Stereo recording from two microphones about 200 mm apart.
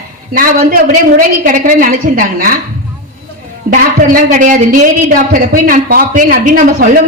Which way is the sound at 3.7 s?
45° right (ahead or behind).